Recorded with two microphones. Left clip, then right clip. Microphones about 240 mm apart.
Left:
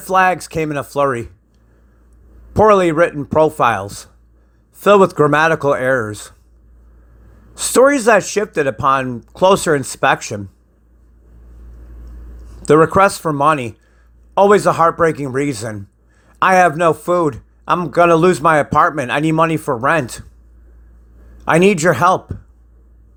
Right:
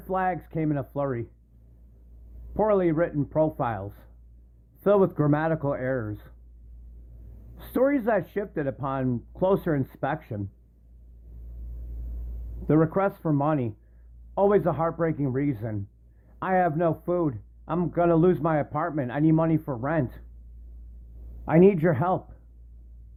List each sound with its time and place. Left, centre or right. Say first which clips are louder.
0.1 s a man's voice: left 14 dB; left
2.5 s a man's voice: left 12 dB; left
7.5 s a man's voice: left 13 dB; left
12.6 s a man's voice: left 13 dB; left
21.4 s a man's voice: left 8 dB; left